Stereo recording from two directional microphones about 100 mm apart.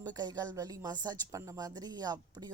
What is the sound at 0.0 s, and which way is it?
Speech, 45° right (ahead or behind).